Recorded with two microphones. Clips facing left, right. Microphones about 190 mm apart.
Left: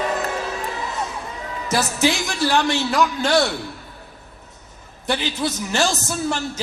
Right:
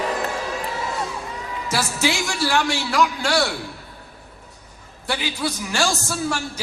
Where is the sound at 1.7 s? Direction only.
20° left (ahead or behind).